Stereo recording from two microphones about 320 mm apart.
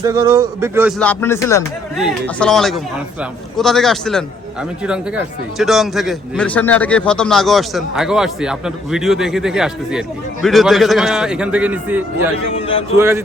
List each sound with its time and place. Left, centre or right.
0.0 s a man's voice: centre
12.5 s a man's voice: centre
13.0 s speech: centre